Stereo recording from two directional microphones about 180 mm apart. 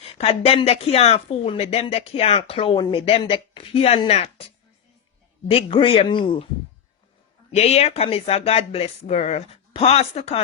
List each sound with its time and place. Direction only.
0.0 s speech: 35° left (ahead or behind)
5.5 s speech: 30° left (ahead or behind)
7.5 s speech: 35° left (ahead or behind)